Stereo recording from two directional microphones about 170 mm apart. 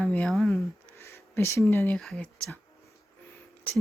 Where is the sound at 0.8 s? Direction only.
15° left (ahead or behind).